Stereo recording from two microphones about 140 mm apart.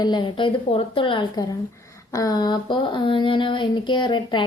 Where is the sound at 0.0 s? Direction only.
30° left (ahead or behind).